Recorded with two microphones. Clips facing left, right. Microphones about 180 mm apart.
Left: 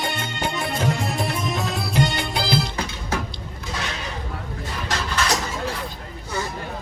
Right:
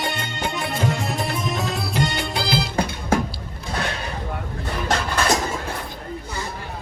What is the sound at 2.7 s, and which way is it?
Music, 50° right (ahead or behind).